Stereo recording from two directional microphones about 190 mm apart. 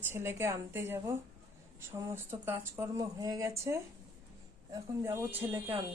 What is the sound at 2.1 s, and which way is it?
A woman's voice, 10° right (ahead or behind).